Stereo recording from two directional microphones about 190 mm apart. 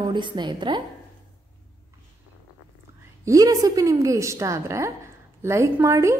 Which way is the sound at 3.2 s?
20° right (ahead or behind).